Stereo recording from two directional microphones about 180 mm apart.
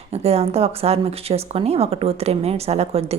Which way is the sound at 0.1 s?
35° right (ahead or behind).